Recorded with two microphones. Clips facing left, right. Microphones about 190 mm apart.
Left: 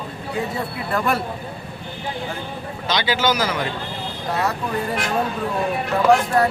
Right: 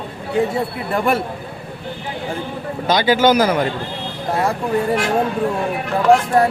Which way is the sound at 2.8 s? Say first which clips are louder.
Right 7 dB; 45° right (ahead or behind).